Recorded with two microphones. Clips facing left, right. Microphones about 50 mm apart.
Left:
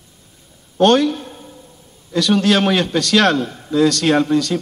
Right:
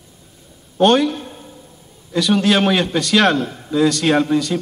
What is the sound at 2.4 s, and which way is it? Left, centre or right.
Speech, centre.